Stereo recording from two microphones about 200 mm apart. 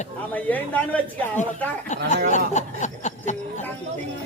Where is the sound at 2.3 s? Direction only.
35° left (ahead or behind).